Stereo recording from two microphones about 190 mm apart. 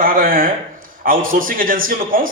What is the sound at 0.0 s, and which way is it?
A man's voice, 50° right (ahead or behind).